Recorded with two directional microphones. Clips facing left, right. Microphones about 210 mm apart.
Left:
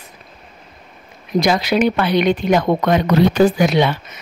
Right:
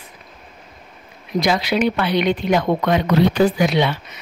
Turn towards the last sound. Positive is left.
turn(degrees=45)  # may be behind; listen again after turning